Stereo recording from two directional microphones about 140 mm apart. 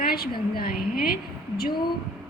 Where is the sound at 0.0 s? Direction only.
90° left.